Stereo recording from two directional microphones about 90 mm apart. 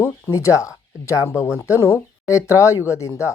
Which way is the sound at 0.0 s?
35° left (ahead or behind).